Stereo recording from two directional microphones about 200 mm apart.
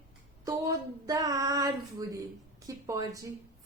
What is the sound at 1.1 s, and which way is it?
Speech, 15° right (ahead or behind).